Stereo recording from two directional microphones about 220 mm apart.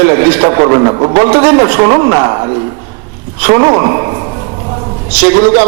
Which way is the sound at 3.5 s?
25° right (ahead or behind).